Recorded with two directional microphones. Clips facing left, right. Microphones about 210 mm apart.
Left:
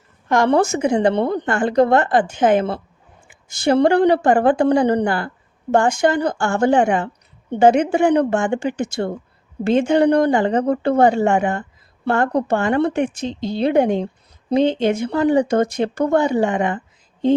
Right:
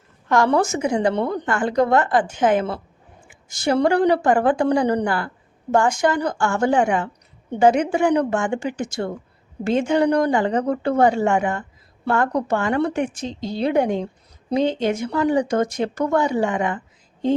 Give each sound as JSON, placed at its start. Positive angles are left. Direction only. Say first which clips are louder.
{"t": 0.3, "sound": "a woman's voice", "louder": "left 2 dB", "side_deg": 20}